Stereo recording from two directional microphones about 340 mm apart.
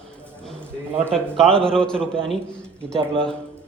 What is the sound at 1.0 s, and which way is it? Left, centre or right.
Speech, centre.